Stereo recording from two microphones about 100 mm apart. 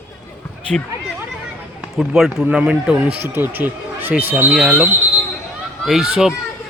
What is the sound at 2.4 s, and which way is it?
A man's voice, 10° right (ahead or behind).